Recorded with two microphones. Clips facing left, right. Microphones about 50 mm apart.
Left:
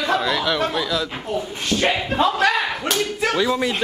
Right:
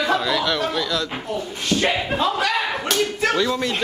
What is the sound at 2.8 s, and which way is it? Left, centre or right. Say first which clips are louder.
Speech: right 1 dB; centre.